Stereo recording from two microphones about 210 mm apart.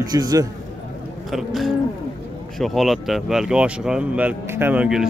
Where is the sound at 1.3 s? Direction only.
Centre (ahead or behind).